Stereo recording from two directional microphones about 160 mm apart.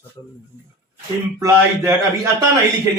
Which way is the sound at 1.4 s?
20° right (ahead or behind).